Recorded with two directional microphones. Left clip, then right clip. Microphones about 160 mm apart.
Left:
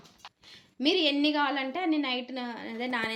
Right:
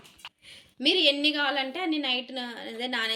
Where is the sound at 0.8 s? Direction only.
45° left (ahead or behind).